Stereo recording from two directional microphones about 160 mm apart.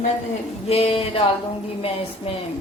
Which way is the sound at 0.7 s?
35° left (ahead or behind).